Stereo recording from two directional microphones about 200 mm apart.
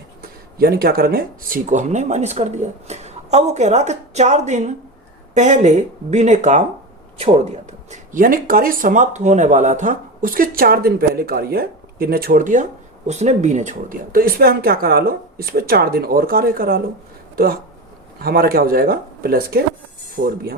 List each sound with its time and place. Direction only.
0.2 s speech: 50° right (ahead or behind)
18.2 s speech: 50° right (ahead or behind)